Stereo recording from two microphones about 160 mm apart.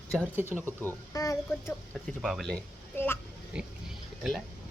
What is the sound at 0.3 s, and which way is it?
Speech, 15° right (ahead or behind).